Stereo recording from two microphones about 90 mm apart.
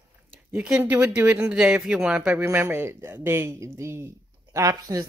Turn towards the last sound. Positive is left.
turn(degrees=-35)  # may be behind; listen again after turning